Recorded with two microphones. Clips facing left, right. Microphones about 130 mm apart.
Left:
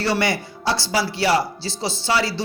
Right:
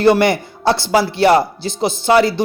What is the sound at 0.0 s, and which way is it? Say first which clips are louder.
Speech: right 9 dB; 55° right (ahead or behind).